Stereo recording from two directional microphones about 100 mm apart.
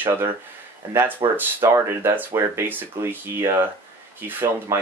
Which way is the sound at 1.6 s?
25° right (ahead or behind).